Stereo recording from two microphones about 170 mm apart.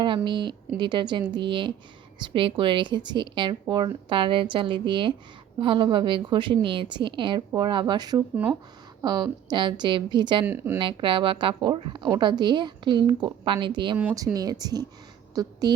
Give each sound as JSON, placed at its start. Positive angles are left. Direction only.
{"t": 0.3, "sound": "a woman's voice", "side_deg": -30}
{"t": 10.4, "sound": "speech", "side_deg": -10}
{"t": 10.8, "sound": "a woman's voice", "side_deg": -30}